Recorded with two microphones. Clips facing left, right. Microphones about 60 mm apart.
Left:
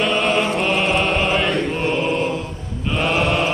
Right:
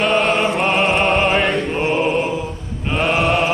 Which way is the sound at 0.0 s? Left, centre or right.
Right.